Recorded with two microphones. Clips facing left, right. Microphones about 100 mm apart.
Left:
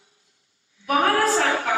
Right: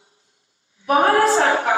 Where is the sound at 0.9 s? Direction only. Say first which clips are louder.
Right 4 dB; 30° right (ahead or behind).